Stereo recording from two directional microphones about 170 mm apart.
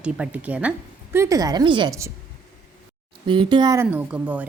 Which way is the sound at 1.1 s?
20° right (ahead or behind).